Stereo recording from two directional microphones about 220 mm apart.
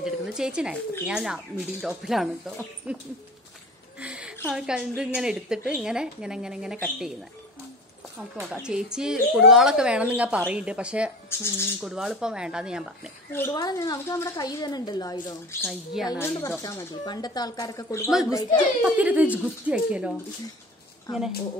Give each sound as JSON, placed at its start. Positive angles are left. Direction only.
{"t": 0.0, "sound": "speech", "side_deg": -5}
{"t": 4.0, "sound": "a sound", "side_deg": -5}
{"t": 4.5, "sound": "speech", "side_deg": -5}
{"t": 8.4, "sound": "speech", "side_deg": -5}
{"t": 11.2, "sound": "a woman's voice", "side_deg": 10}
{"t": 11.8, "sound": "speech", "side_deg": 0}
{"t": 13.3, "sound": "a woman's voice", "side_deg": 10}
{"t": 15.6, "sound": "speech", "side_deg": 0}
{"t": 16.1, "sound": "a woman's voice", "side_deg": 15}
{"t": 18.8, "sound": "speech", "side_deg": -5}